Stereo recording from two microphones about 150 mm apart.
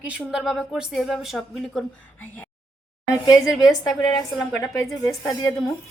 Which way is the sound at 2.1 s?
10° left (ahead or behind).